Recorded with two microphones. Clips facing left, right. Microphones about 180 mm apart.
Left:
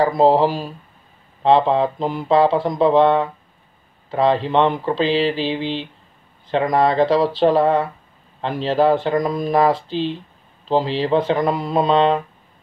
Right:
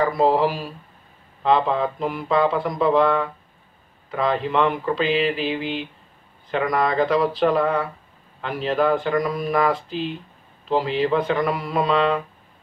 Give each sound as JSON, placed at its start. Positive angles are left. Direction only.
{"t": 0.0, "sound": "speech", "side_deg": 30}